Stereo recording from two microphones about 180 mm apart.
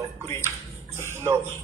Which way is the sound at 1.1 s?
15° right (ahead or behind).